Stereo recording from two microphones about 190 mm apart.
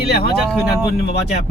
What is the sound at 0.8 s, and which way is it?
Speech, 55° left (ahead or behind).